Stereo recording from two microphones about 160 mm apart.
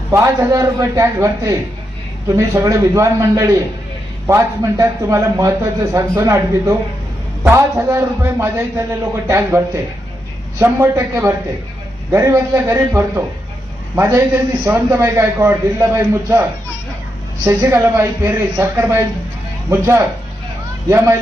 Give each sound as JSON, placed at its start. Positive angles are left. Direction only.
{"t": 0.1, "sound": "a man's voice", "side_deg": -20}